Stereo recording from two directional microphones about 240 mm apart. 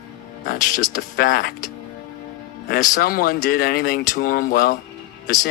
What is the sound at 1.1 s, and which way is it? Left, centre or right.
Speech, left.